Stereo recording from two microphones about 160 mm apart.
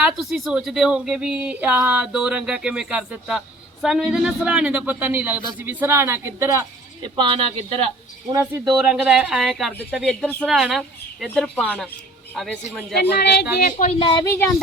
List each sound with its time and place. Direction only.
0.2 s speech: centre (ahead or behind); by 6.7 s 15° right (ahead or behind)
7.0 s speech: 30° right (ahead or behind)
8.3 s speech: 20° right (ahead or behind)
8.6 s speech: 5° right (ahead or behind)
13.0 s speech: 75° left (ahead or behind); by 13.9 s 55° left (ahead or behind)
14.0 s speech: 30° left (ahead or behind)